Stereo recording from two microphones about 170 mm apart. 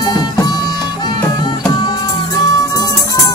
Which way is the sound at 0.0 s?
25° left (ahead or behind).